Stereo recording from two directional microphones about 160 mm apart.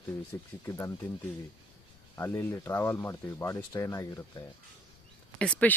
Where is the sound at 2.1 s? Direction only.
15° left (ahead or behind).